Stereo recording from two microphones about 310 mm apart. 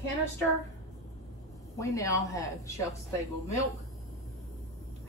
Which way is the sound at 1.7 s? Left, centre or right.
Centre.